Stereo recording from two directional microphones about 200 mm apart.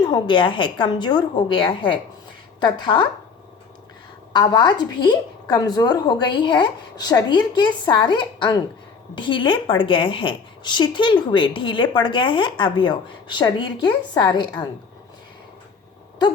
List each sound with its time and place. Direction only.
0.0 s a woman's voice: 20° left (ahead or behind)
4.3 s a woman's voice: 20° left (ahead or behind)